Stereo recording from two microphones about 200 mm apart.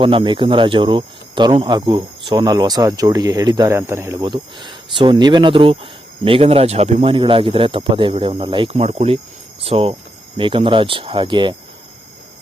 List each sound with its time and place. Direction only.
0.0 s speech: 25° right (ahead or behind)